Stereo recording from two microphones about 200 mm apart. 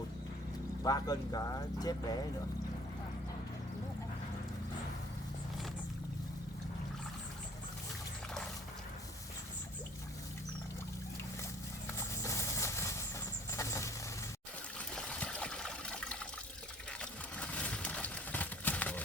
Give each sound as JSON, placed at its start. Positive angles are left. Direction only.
{"t": 0.8, "sound": "speech", "side_deg": 20}
{"t": 11.9, "sound": "vehicle", "side_deg": 15}
{"t": 14.8, "sound": "water", "side_deg": 5}
{"t": 17.0, "sound": "a sound", "side_deg": 5}